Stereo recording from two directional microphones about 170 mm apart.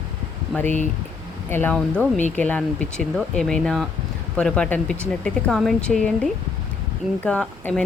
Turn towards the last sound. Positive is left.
turn(degrees=5)  # may be behind; listen again after turning